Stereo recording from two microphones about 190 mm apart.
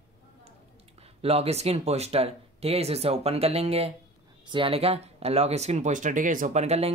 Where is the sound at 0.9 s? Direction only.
30° right (ahead or behind).